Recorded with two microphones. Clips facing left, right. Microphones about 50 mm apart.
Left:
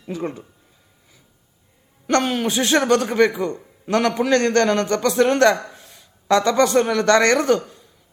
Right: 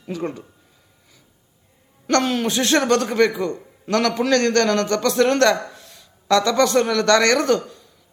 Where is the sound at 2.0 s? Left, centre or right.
Centre.